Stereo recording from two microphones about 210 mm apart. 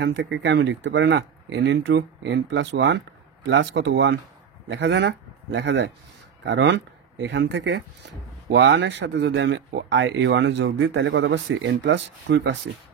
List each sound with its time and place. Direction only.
0.0 s a man's voice: 60° right (ahead or behind)